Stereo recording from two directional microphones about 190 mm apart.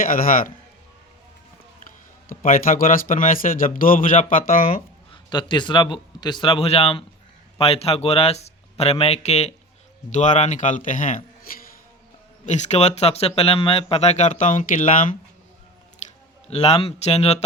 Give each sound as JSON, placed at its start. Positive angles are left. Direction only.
{"t": 0.0, "sound": "a man's voice", "side_deg": 45}
{"t": 2.3, "sound": "a man's voice", "side_deg": 45}
{"t": 5.1, "sound": "a man's voice", "side_deg": 25}
{"t": 11.5, "sound": "music", "side_deg": 50}
{"t": 12.5, "sound": "speech", "side_deg": 35}
{"t": 16.5, "sound": "speech", "side_deg": 30}